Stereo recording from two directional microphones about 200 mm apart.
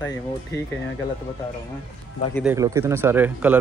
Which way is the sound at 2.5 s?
15° right (ahead or behind).